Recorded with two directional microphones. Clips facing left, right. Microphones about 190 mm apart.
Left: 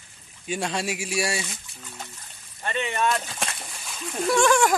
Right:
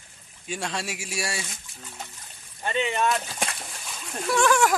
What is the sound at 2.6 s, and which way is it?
Speech, 15° right (ahead or behind).